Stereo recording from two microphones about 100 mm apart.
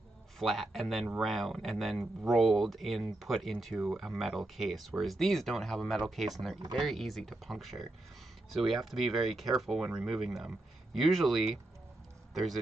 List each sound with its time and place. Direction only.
0.4 s speech: 5° left (ahead or behind)